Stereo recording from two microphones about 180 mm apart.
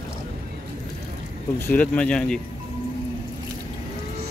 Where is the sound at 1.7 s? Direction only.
10° left (ahead or behind).